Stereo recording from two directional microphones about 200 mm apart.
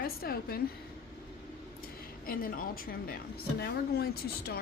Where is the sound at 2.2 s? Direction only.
45° left (ahead or behind).